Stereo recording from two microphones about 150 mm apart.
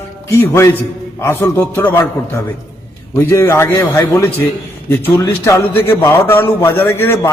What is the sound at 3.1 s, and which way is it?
A man's voice, 20° left (ahead or behind).